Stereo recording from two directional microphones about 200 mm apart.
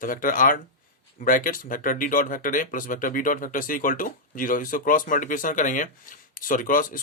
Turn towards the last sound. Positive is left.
turn(degrees=45)  # may be behind; listen again after turning